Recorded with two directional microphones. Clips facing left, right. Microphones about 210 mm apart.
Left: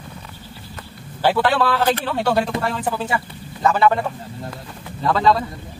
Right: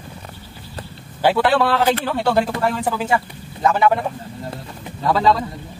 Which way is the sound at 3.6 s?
10° right (ahead or behind).